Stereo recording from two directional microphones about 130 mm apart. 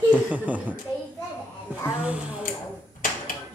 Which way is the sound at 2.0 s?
10° right (ahead or behind).